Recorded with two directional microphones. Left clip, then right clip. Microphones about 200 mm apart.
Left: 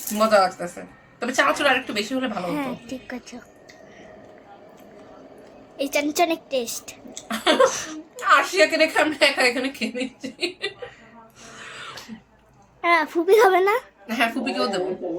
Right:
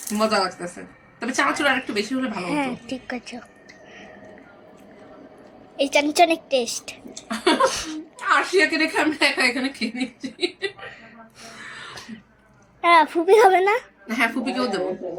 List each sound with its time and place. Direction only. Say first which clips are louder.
0.2 s a woman's voice: left 4 dB; 20° left (ahead or behind)
2.5 s a woman's voice: right 3 dB; 10° right (ahead or behind)
5.7 s a woman's voice: right 4 dB; 10° right (ahead or behind)
7.3 s a woman's voice: left 1 dB; 20° left (ahead or behind)
7.7 s a woman's voice: right 1 dB; centre (ahead or behind)
8.3 s a woman's voice: left 2 dB; 20° left (ahead or behind)
12.8 s a woman's voice: right 4 dB; 10° right (ahead or behind)
14.1 s a woman's voice: even; 25° left (ahead or behind)